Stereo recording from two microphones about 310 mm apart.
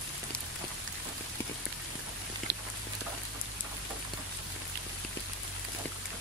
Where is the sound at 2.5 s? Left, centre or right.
Right.